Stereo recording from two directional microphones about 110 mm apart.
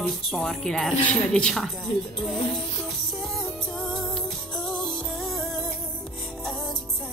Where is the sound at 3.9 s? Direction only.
Centre (ahead or behind).